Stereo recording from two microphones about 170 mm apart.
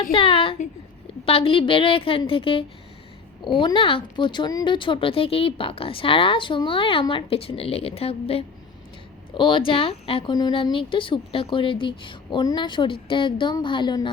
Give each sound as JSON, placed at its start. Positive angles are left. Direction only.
{"t": 0.0, "sound": "a woman's voice", "side_deg": 30}